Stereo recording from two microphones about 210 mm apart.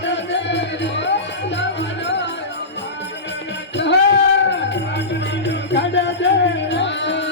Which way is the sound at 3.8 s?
55° left (ahead or behind).